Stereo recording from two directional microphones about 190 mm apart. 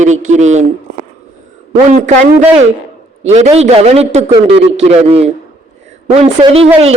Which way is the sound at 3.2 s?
35° right (ahead or behind).